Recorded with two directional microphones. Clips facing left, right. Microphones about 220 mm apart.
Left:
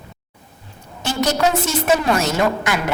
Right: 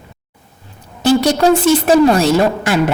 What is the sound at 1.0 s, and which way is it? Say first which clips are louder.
A woman's voice: right 8 dB; 30° right (ahead or behind).